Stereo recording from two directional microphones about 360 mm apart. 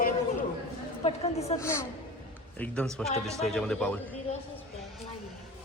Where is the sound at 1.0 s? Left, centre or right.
Centre.